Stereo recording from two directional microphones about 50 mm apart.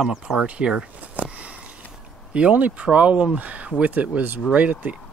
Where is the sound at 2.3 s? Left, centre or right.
Right.